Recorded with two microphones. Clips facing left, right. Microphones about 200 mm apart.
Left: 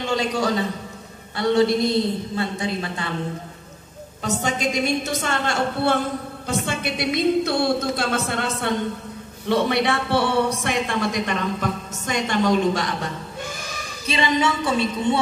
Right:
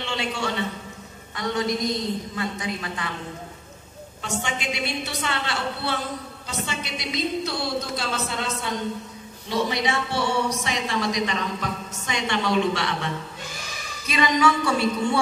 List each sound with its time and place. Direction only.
0.0 s a man's voice: 40° left (ahead or behind)
4.2 s a woman's voice: 40° left (ahead or behind)
14.0 s a woman's voice: 30° left (ahead or behind)